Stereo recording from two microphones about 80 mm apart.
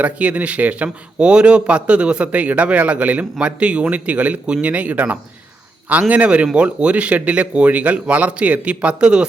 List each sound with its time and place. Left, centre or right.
0.0 s a man's voice: centre